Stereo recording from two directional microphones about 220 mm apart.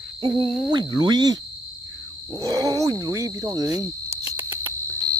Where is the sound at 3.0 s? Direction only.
15° right (ahead or behind).